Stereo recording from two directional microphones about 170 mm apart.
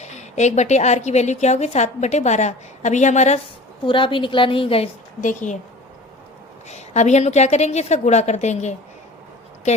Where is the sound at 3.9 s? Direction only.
30° left (ahead or behind).